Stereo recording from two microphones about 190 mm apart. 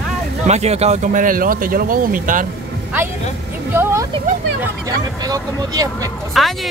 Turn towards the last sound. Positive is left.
turn(degrees=0)  # may be behind; listen again after turning